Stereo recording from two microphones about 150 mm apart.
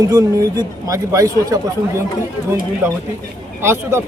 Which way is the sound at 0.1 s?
25° right (ahead or behind).